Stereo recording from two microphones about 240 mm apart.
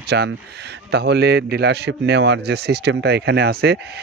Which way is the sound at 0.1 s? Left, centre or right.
Right.